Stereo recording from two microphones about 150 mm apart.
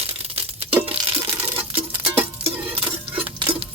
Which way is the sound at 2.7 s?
35° right (ahead or behind).